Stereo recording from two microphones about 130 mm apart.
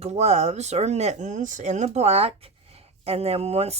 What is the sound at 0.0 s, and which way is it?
Speech, 55° right (ahead or behind).